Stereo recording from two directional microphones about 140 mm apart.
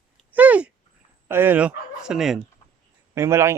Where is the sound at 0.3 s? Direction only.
10° right (ahead or behind).